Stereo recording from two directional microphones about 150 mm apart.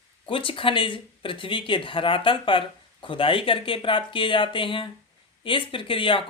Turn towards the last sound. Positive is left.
turn(degrees=35)  # may be behind; listen again after turning